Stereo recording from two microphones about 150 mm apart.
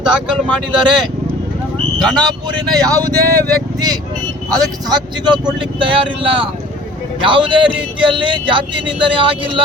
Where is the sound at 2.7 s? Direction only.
25° right (ahead or behind).